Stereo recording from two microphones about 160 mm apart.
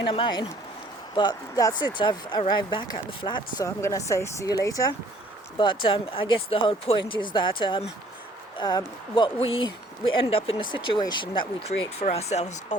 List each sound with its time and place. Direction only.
0.0 s speech: 30° left (ahead or behind)
3.8 s speech: 15° left (ahead or behind); by 12.7 s 45° left (ahead or behind)